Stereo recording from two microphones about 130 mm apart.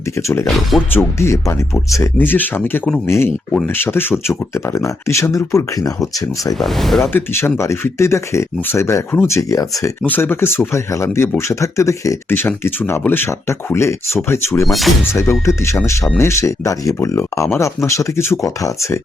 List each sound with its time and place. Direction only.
0.2 s speech: 20° left (ahead or behind)
0.4 s speech: centre (ahead or behind)
0.9 s speech: 20° left (ahead or behind)
6.6 s speech: centre (ahead or behind)
7.0 s speech: 15° left (ahead or behind)
10.0 s speech: 15° left (ahead or behind)
14.7 s speech: centre (ahead or behind)
15.1 s speech: 20° left (ahead or behind)